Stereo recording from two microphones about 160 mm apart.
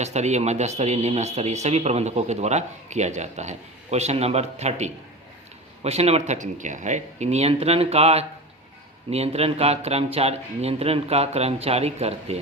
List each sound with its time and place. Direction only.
0.0 s speech: 45° right (ahead or behind)